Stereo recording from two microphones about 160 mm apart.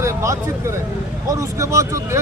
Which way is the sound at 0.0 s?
20° right (ahead or behind).